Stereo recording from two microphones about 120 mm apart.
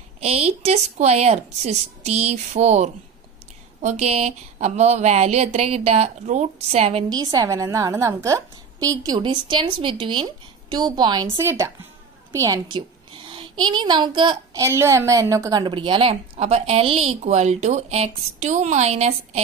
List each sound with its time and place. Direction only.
0.2 s speech: 60° right (ahead or behind)
7.1 s a woman's voice: 30° right (ahead or behind)
11.3 s a woman's voice: 25° right (ahead or behind)
12.7 s a child's voice: 45° right (ahead or behind)
14.6 s a woman's voice: 25° right (ahead or behind)
15.6 s speech: 40° right (ahead or behind); by 19.4 s 65° right (ahead or behind)